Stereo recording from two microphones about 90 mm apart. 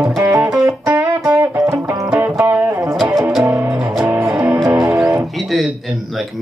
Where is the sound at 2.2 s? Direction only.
20° right (ahead or behind).